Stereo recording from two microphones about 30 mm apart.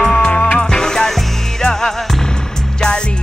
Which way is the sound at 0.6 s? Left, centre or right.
Left.